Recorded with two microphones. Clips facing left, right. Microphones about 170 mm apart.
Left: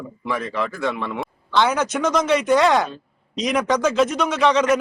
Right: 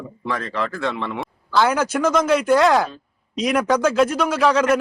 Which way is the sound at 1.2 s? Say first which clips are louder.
Right 1 dB; 5° right (ahead or behind).